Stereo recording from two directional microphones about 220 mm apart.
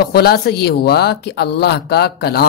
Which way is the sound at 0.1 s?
45° left (ahead or behind).